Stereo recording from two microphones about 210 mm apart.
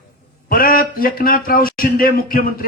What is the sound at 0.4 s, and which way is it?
Speech, 45° left (ahead or behind).